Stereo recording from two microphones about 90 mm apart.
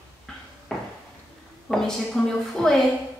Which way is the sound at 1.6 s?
5° left (ahead or behind).